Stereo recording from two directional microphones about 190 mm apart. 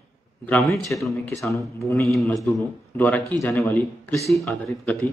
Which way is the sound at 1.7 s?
15° left (ahead or behind).